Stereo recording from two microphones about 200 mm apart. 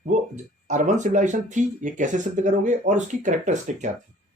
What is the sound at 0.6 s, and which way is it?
Speech, 35° right (ahead or behind).